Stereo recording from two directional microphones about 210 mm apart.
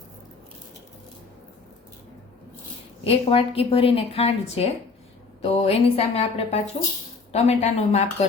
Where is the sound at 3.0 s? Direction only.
25° left (ahead or behind).